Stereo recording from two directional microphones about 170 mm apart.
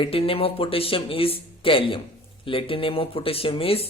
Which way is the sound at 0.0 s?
35° left (ahead or behind).